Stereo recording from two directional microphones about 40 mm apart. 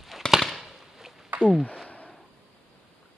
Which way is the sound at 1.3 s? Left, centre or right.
Right.